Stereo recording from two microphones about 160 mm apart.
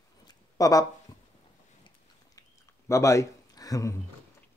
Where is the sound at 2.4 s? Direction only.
20° left (ahead or behind).